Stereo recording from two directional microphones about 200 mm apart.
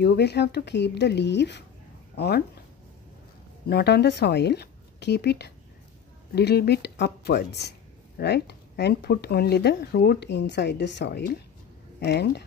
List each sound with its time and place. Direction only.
0.0 s speech: 55° left (ahead or behind)
3.6 s a woman's voice: 55° left (ahead or behind)